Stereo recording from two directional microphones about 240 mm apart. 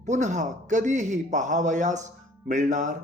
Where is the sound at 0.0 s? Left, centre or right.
Right.